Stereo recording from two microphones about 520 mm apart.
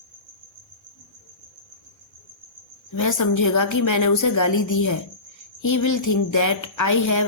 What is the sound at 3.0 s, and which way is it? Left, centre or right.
Speech, left.